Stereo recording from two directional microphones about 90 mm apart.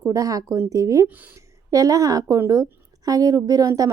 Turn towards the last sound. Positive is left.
turn(degrees=-40)  # may be behind; listen again after turning